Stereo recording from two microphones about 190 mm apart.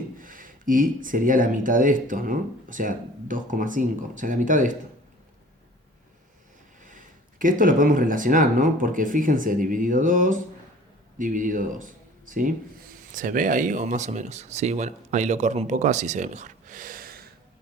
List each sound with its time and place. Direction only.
0.2 s speech: 45° right (ahead or behind)
6.8 s speech: 45° right (ahead or behind)